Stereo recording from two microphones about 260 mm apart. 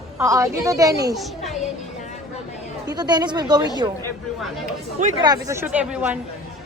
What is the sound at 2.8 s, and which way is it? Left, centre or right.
Speech, centre.